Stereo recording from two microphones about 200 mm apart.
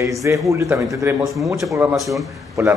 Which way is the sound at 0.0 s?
15° right (ahead or behind).